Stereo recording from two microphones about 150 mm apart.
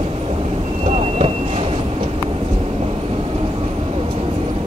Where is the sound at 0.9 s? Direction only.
45° right (ahead or behind).